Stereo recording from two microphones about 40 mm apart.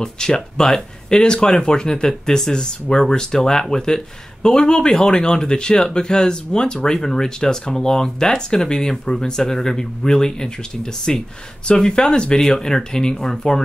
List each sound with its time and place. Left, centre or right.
0.0 s speech: centre